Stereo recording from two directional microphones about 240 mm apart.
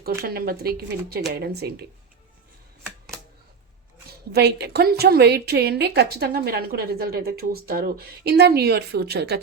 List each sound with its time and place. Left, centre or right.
0.0 s a woman's voice: right
4.3 s a woman's voice: right